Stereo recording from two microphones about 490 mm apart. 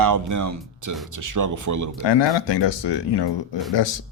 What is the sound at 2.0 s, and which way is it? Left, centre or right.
Speech, left.